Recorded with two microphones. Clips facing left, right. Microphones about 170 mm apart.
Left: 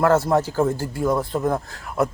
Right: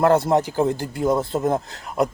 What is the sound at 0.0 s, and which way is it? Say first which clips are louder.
A man's voice: right 1 dB; 20° right (ahead or behind).